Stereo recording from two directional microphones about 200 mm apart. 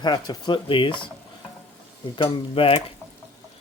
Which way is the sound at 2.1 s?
25° left (ahead or behind).